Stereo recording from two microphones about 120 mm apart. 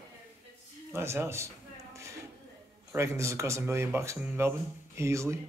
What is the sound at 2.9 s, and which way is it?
Speech, 25° right (ahead or behind).